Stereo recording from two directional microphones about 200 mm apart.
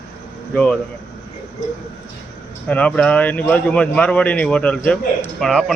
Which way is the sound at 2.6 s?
5° left (ahead or behind).